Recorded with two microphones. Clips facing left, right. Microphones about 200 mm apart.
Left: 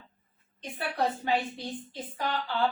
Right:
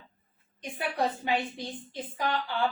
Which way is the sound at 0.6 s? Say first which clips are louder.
Even; 15° right (ahead or behind).